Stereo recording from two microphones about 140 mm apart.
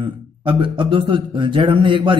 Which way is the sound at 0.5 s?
35° right (ahead or behind).